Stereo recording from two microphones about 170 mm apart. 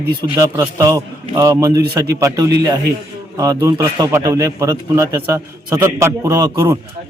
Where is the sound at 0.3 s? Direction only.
15° right (ahead or behind).